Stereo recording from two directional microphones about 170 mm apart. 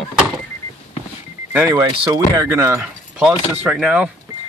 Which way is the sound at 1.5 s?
15° right (ahead or behind).